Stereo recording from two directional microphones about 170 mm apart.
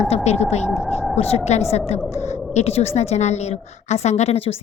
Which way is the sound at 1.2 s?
35° left (ahead or behind).